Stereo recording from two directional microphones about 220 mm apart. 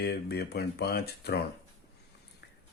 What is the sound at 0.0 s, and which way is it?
Speech, 45° left (ahead or behind).